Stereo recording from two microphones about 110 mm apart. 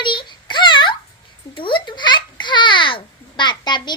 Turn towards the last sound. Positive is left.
turn(degrees=45)  # may be behind; listen again after turning